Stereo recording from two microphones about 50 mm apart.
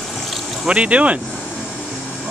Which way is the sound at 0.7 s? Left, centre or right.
Right.